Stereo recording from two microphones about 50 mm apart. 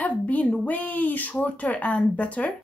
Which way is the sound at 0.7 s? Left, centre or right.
Left.